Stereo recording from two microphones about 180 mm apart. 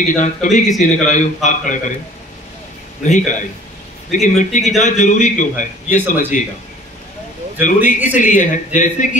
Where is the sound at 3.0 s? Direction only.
45° left (ahead or behind).